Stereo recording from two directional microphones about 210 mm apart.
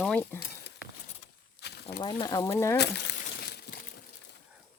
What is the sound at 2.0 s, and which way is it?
Speech, 20° left (ahead or behind).